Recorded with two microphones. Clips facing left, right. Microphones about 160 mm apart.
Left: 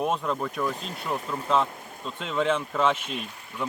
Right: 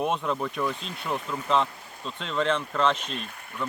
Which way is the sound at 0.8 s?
45° left (ahead or behind).